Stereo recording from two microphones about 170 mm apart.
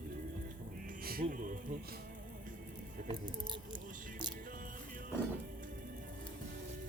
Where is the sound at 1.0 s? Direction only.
60° right (ahead or behind).